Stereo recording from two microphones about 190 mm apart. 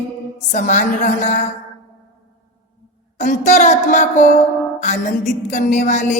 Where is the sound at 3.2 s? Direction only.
40° left (ahead or behind).